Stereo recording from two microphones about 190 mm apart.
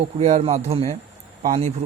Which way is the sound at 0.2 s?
35° right (ahead or behind).